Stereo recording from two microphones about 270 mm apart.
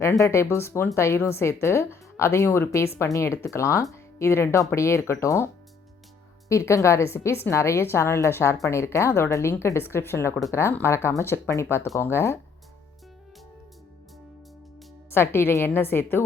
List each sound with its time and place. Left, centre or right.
0.0 s a woman's voice: centre
6.5 s a woman's voice: centre
15.1 s a woman's voice: centre